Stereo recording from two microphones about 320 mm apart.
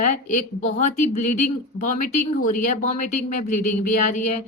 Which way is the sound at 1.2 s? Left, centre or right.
Left.